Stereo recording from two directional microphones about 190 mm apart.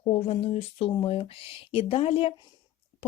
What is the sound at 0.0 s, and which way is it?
Speech, 30° left (ahead or behind).